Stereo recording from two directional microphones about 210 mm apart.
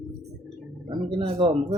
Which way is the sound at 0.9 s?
25° right (ahead or behind).